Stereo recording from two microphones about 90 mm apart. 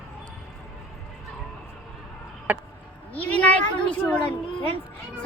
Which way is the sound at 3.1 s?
15° left (ahead or behind).